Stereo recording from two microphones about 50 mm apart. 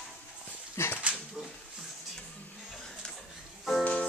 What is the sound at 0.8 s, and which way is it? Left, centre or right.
Dog, left.